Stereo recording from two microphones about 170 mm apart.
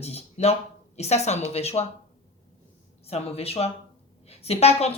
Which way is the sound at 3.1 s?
35° left (ahead or behind).